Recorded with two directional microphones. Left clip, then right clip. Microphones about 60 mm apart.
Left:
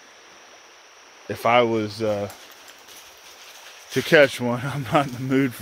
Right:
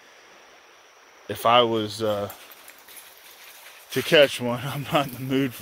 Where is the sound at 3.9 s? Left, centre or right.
Centre.